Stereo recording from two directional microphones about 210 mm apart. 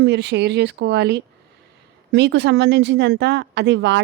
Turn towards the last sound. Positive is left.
turn(degrees=-55)  # may be behind; listen again after turning